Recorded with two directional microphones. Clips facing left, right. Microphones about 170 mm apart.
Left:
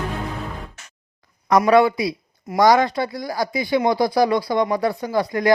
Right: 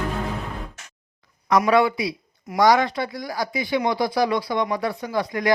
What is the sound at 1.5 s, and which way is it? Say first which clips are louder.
Speech: left 3 dB; 40° left (ahead or behind).